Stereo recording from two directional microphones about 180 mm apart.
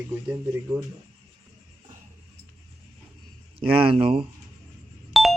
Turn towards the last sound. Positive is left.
turn(degrees=0)  # may be behind; listen again after turning